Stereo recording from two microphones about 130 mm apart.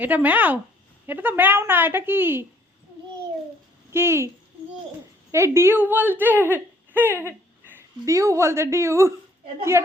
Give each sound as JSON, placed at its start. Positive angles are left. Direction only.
{"t": 0.0, "sound": "speech", "side_deg": -15}
{"t": 3.9, "sound": "a woman's voice", "side_deg": -20}
{"t": 5.3, "sound": "a woman's voice", "side_deg": -20}